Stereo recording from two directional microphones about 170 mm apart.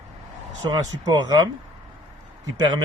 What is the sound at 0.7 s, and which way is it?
Speech, 20° right (ahead or behind).